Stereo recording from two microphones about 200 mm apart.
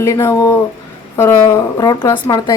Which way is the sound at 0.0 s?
15° left (ahead or behind).